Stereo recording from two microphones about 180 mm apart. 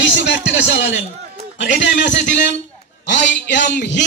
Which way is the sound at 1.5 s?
90° left.